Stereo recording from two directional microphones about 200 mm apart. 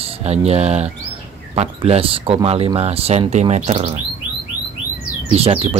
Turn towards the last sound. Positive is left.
turn(degrees=-30)  # may be behind; listen again after turning